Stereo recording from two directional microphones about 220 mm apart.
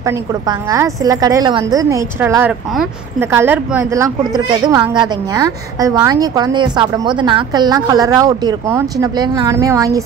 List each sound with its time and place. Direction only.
0.0 s speech: 15° right (ahead or behind)